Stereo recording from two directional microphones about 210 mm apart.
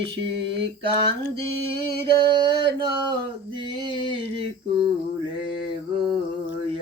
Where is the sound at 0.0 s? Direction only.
25° right (ahead or behind).